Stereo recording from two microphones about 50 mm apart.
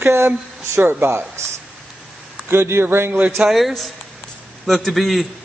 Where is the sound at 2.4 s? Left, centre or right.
Right.